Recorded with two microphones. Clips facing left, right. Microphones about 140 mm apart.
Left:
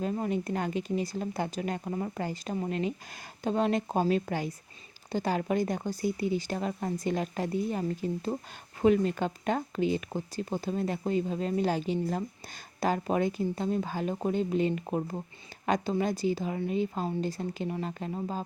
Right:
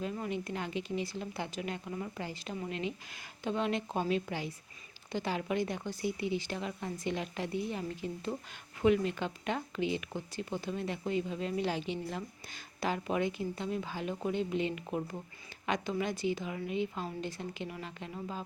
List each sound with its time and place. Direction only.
0.0 s speech: 40° left (ahead or behind)